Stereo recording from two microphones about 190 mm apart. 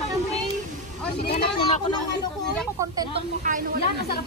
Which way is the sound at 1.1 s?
55° left (ahead or behind).